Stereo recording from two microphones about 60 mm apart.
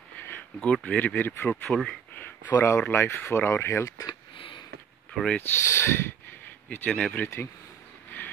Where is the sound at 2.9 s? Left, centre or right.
Left.